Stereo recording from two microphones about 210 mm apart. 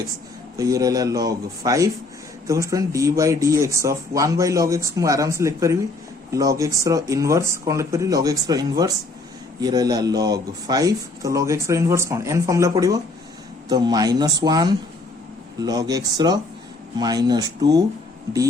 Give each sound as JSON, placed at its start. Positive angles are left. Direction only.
{"t": 0.5, "sound": "a man's voice", "side_deg": -15}